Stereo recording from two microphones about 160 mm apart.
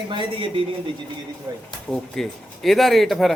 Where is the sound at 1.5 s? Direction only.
20° right (ahead or behind).